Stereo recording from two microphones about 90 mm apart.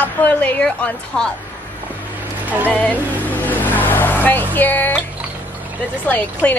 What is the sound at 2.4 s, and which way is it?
Speech, 20° right (ahead or behind).